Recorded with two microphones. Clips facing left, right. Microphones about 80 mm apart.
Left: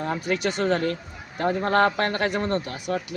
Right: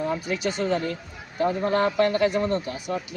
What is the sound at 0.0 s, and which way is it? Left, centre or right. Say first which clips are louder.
A man's voice: left 1 dB; left.